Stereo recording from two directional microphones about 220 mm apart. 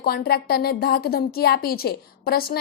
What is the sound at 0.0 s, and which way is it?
A woman's voice, 45° left (ahead or behind).